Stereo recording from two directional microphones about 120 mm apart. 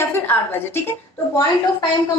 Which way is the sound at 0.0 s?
20° left (ahead or behind).